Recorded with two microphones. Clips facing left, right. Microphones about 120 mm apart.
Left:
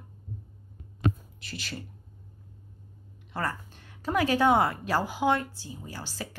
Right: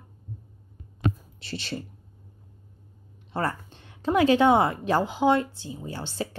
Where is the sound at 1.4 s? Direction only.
30° right (ahead or behind).